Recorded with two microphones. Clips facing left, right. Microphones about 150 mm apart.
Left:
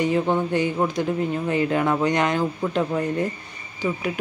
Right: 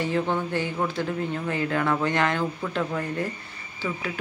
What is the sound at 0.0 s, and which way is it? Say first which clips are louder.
Speech: left 4 dB; 15° left (ahead or behind).